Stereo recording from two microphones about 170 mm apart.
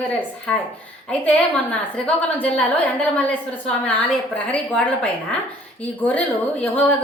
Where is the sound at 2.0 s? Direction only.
5° left (ahead or behind).